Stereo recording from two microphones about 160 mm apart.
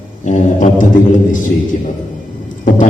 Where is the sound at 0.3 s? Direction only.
50° left (ahead or behind).